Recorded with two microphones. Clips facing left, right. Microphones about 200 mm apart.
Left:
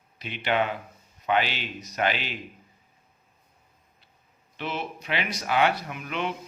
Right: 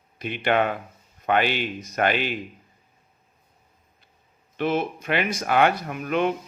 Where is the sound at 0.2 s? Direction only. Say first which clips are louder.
Right 4 dB; 50° right (ahead or behind).